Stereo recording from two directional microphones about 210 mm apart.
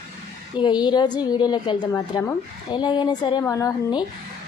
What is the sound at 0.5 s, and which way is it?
A woman's voice, 20° left (ahead or behind).